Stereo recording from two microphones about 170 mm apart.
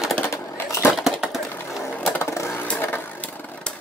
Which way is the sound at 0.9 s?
Centre (ahead or behind).